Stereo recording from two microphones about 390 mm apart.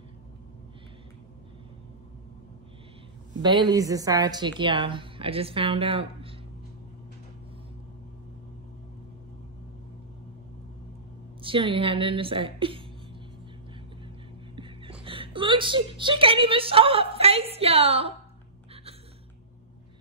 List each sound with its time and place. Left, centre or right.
3.4 s a woman's voice: centre
11.4 s a woman's voice: centre
14.5 s a woman's voice: centre